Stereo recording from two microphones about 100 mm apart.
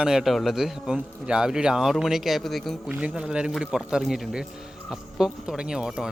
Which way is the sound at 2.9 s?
10° right (ahead or behind).